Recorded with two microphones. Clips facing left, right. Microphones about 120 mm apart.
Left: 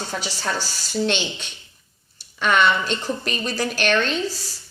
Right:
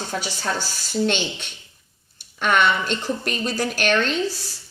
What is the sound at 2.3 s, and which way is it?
A woman's voice, 50° right (ahead or behind).